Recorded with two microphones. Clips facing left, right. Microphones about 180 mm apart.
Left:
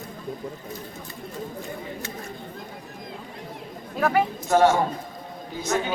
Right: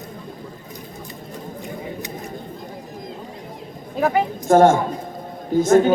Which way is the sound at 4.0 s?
20° right (ahead or behind).